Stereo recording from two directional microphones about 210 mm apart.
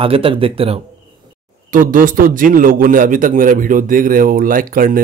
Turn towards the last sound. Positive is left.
turn(degrees=-40)  # may be behind; listen again after turning